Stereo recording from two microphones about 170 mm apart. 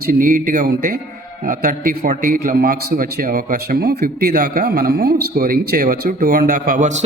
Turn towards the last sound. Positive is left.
turn(degrees=-45)  # may be behind; listen again after turning